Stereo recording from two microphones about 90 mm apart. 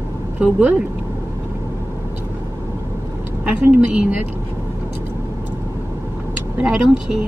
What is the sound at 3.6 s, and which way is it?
Speech, 20° right (ahead or behind).